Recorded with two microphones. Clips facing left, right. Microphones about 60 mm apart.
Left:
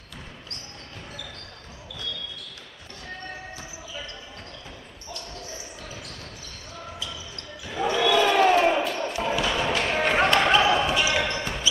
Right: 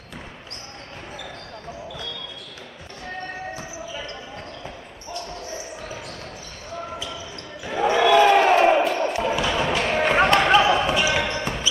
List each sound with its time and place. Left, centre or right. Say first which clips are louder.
7.6 s basketball bounce: right 5 dB; right
9.2 s basketball bounce: right 3 dB; centre